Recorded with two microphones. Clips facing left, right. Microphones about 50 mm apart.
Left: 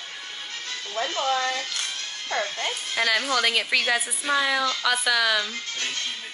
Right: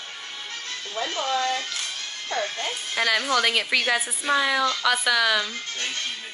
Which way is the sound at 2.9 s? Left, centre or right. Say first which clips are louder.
Right 1 dB; centre.